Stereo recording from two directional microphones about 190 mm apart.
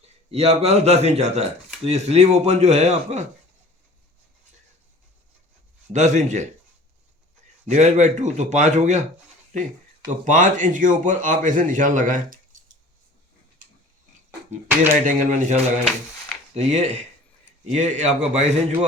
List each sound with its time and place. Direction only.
0.3 s speech: 35° right (ahead or behind)
5.9 s speech: 40° right (ahead or behind)
7.7 s speech: 40° right (ahead or behind)
10.2 s speech: 45° right (ahead or behind)
15.0 s speech: 40° right (ahead or behind)